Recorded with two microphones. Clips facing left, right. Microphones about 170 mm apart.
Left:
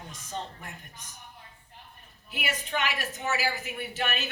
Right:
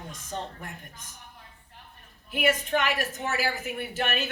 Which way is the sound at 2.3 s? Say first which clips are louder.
Right 8 dB; 50° right (ahead or behind).